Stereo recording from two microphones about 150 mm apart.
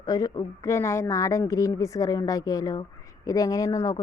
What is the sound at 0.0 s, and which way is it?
A woman's voice, 25° left (ahead or behind).